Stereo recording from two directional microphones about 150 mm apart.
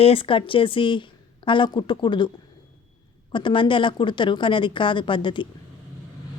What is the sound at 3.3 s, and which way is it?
A woman's voice, 35° left (ahead or behind).